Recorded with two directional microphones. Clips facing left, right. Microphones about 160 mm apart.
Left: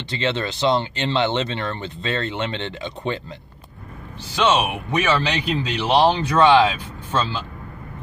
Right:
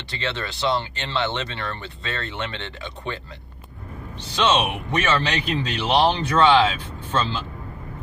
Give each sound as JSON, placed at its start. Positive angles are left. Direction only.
{"t": 0.1, "sound": "speech", "side_deg": 20}
{"t": 4.5, "sound": "speech", "side_deg": 10}